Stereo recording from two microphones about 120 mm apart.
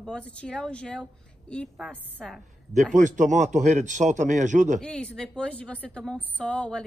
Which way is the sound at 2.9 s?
90° right.